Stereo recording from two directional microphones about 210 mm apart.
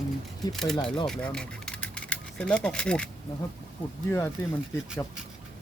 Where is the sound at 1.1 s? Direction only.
5° left (ahead or behind).